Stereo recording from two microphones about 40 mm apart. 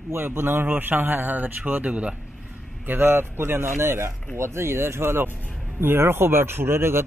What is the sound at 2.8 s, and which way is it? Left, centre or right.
Speech, right.